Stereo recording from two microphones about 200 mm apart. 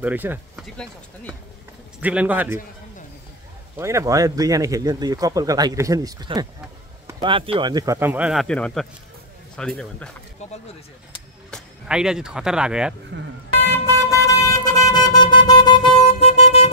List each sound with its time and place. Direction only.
0.0 s speech: 10° right (ahead or behind)
2.0 s speech: 5° right (ahead or behind)
3.7 s speech: 15° right (ahead or behind); by 10.1 s 5° left (ahead or behind)
11.5 s speech: 5° right (ahead or behind)
13.1 s speech: 60° right (ahead or behind)
13.8 s vehicle: 15° left (ahead or behind); by 16.7 s 35° left (ahead or behind)